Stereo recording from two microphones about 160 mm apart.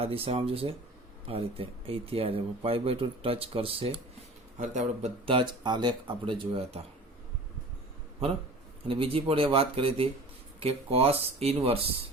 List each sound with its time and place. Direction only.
0.0 s speech: 35° right (ahead or behind)
4.5 s a man's voice: 50° right (ahead or behind)
5.2 s speech: 30° right (ahead or behind)
8.9 s speech: 35° right (ahead or behind)